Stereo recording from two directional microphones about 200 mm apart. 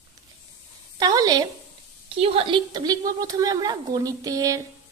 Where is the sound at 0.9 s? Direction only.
20° right (ahead or behind).